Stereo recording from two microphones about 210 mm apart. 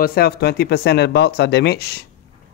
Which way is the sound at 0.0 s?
45° left (ahead or behind).